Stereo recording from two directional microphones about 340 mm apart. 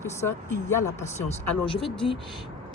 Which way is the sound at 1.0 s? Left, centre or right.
Centre.